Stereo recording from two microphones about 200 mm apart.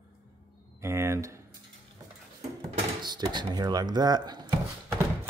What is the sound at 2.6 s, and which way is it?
Speech, 20° right (ahead or behind).